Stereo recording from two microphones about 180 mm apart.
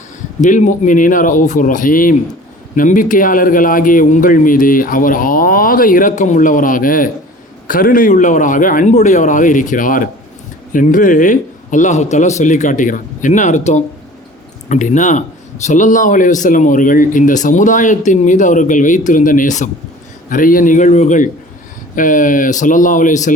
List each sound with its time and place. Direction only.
0.4 s a man's voice: 45° left (ahead or behind)